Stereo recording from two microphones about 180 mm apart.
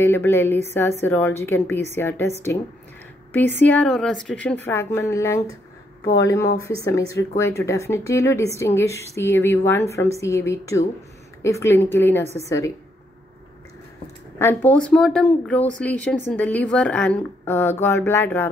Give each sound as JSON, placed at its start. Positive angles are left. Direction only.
{"t": 0.0, "sound": "a woman's voice", "side_deg": 15}
{"t": 3.3, "sound": "a woman's voice", "side_deg": 10}
{"t": 6.8, "sound": "a woman's voice", "side_deg": 20}
{"t": 14.4, "sound": "a woman's voice", "side_deg": 10}